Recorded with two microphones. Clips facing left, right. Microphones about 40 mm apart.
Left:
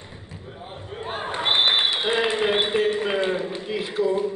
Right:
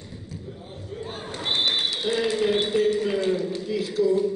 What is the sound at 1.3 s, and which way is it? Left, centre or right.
A man's voice, left.